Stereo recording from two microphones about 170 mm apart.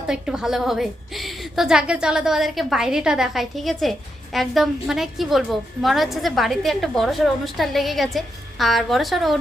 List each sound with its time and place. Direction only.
0.1 s a woman's voice: 5° right (ahead or behind)